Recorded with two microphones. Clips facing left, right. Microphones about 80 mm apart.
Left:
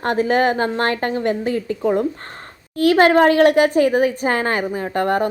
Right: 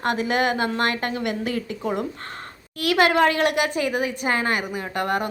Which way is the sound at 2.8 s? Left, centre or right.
Left.